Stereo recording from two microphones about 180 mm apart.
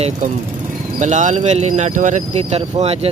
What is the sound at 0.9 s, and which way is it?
Speech, 40° right (ahead or behind).